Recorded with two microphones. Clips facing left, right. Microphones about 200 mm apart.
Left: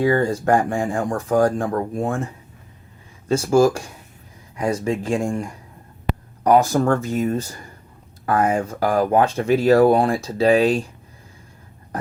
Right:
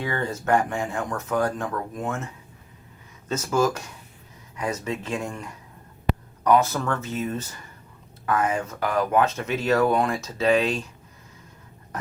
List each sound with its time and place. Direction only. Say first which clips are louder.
0.0 s speech: left 10 dB; 35° left (ahead or behind)
4.8 s speech: left 7 dB; 45° left (ahead or behind)
6.7 s speech: left 8 dB; 45° left (ahead or behind)